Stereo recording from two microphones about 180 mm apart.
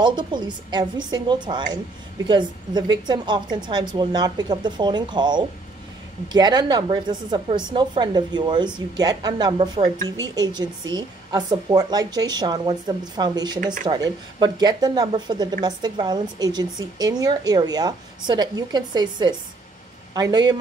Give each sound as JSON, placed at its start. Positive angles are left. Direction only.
{"t": 0.0, "sound": "speech", "side_deg": -25}